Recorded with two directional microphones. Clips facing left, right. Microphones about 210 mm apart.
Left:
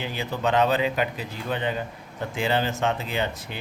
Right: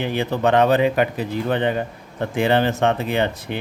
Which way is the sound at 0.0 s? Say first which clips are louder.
Right 7 dB; 60° right (ahead or behind).